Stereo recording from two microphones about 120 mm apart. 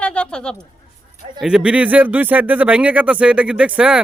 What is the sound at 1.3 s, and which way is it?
Speech, 5° right (ahead or behind).